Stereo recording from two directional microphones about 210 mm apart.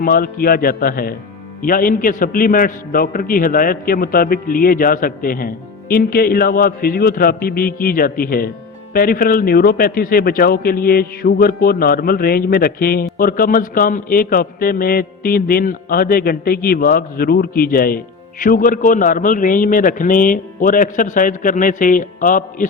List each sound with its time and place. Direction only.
0.0 s a man's voice: 45° left (ahead or behind)